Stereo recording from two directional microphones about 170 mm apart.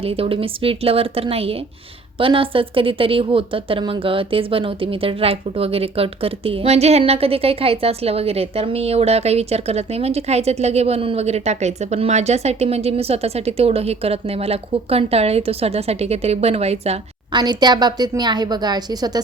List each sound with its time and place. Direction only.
0.0 s a woman's voice: 35° right (ahead or behind)
17.4 s a woman's voice: 25° right (ahead or behind)